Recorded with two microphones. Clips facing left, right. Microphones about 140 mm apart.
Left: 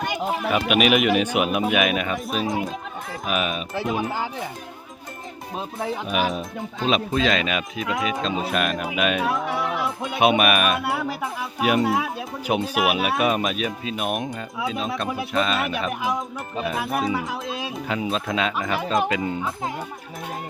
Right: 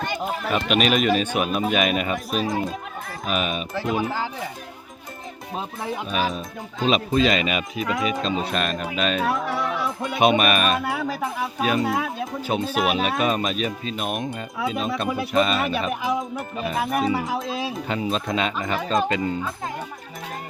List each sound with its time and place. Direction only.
0.0 s chatter: 10° left (ahead or behind)
0.4 s speech: 5° left (ahead or behind)
6.1 s speech: 20° left (ahead or behind)
6.8 s speech: centre (ahead or behind)